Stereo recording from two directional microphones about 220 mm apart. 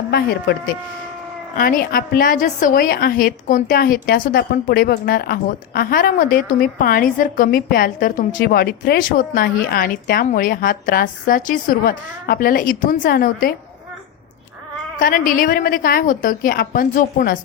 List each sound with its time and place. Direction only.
0.1 s speech: 45° left (ahead or behind)
1.5 s a woman's voice: 40° left (ahead or behind)
14.9 s a woman's voice: 40° left (ahead or behind)